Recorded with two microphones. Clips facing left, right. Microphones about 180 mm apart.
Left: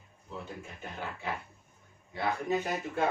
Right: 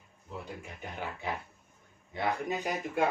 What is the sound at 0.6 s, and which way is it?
Speech, 15° right (ahead or behind).